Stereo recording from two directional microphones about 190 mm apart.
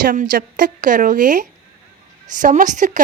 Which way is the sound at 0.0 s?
45° right (ahead or behind).